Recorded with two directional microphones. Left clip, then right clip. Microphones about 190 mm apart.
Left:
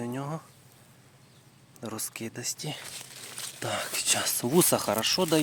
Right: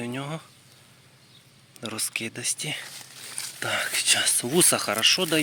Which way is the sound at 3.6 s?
25° left (ahead or behind).